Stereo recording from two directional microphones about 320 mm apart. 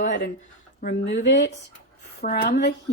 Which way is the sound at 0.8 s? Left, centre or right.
Left.